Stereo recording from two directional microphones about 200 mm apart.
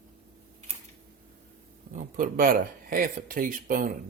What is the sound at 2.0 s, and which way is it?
Speech, 45° right (ahead or behind).